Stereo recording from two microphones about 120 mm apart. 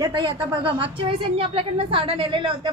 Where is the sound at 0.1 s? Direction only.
45° right (ahead or behind).